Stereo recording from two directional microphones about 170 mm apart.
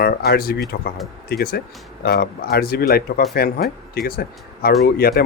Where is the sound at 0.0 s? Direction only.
65° left (ahead or behind).